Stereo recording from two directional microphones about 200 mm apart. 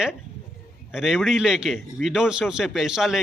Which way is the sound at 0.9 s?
Centre (ahead or behind).